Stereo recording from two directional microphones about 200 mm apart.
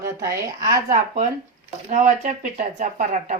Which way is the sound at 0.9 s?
40° right (ahead or behind).